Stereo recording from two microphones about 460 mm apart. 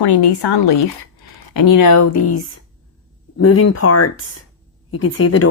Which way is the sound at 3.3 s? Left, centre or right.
Left.